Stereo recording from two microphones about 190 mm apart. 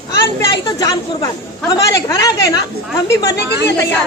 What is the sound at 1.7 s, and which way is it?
Speech, 20° left (ahead or behind).